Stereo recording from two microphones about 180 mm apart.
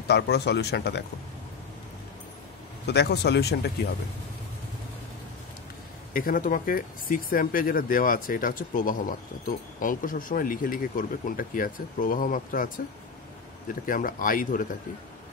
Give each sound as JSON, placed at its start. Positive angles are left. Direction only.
{"t": 0.1, "sound": "speech", "side_deg": 65}
{"t": 2.9, "sound": "speech", "side_deg": 65}
{"t": 6.1, "sound": "speech", "side_deg": 50}
{"t": 13.8, "sound": "speech", "side_deg": 50}